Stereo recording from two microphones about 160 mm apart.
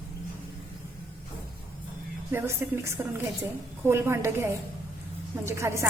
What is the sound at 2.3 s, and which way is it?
A woman's voice, 15° right (ahead or behind).